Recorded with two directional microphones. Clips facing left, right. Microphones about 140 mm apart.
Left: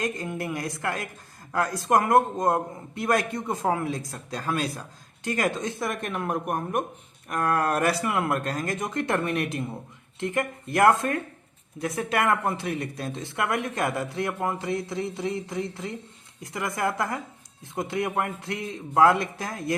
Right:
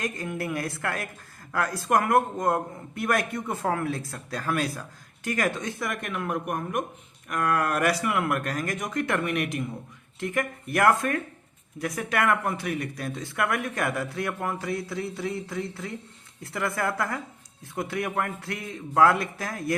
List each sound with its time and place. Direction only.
0.0 s speech: 25° left (ahead or behind)